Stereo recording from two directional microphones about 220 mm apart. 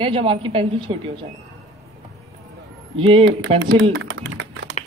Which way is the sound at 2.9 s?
25° right (ahead or behind).